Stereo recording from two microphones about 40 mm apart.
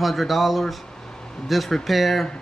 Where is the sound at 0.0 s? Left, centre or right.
Centre.